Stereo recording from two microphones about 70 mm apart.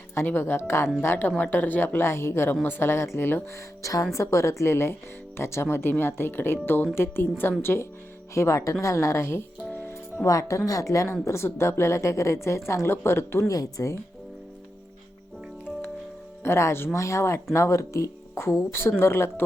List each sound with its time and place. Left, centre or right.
0.3 s a woman's voice: left
3.8 s a woman's voice: left
9.7 s music: left
10.2 s speech: left
11.1 s a woman's voice: left
13.5 s speech: left
16.4 s a woman's voice: left